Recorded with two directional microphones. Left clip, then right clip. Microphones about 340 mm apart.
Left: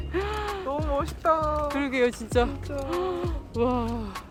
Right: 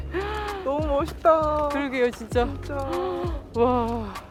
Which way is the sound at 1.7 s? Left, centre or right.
Centre.